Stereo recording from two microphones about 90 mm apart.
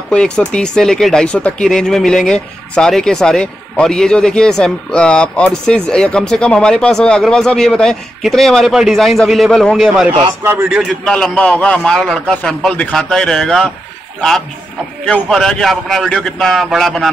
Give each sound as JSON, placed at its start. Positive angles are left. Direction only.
{"t": 0.1, "sound": "a man's voice", "side_deg": 10}
{"t": 10.4, "sound": "a man's voice", "side_deg": -30}
{"t": 10.7, "sound": "a man's voice", "side_deg": -10}
{"t": 11.1, "sound": "a man's voice", "side_deg": 10}
{"t": 15.0, "sound": "a man's voice", "side_deg": 10}